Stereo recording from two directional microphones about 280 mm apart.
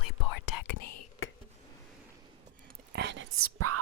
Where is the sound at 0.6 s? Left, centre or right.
Left.